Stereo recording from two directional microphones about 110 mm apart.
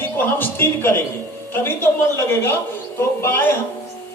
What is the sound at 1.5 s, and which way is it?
Speech, 20° left (ahead or behind).